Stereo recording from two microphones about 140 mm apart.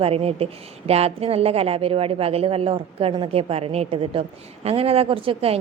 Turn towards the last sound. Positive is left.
turn(degrees=-40)  # may be behind; listen again after turning